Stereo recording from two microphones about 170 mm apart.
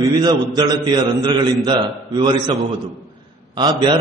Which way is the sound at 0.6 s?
25° right (ahead or behind).